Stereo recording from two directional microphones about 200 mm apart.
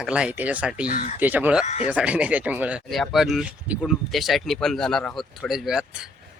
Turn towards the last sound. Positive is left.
turn(degrees=-5)  # may be behind; listen again after turning